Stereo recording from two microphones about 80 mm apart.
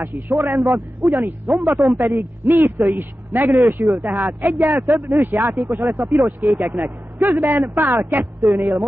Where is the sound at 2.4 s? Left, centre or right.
Right.